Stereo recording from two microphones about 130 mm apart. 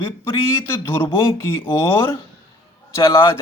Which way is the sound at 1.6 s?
20° left (ahead or behind).